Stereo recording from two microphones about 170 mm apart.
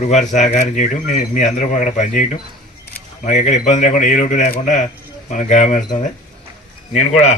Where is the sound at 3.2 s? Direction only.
45° left (ahead or behind).